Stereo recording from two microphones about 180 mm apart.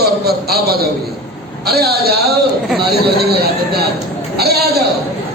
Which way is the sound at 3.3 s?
60° right (ahead or behind).